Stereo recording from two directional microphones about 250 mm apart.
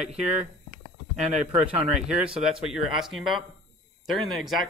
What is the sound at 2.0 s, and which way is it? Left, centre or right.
Speech, centre.